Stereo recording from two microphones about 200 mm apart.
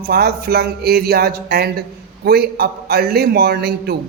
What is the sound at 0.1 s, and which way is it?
A man's voice, 50° right (ahead or behind).